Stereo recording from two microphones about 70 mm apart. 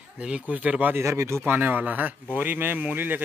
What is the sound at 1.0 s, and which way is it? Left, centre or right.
Speech, right.